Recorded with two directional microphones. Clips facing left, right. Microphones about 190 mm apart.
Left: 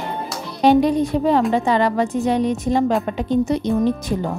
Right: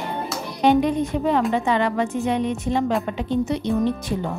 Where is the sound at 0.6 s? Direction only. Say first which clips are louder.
Left 3 dB; 35° left (ahead or behind).